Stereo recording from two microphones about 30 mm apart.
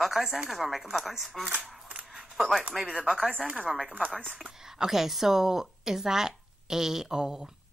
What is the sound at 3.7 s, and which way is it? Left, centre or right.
A woman's voice, centre.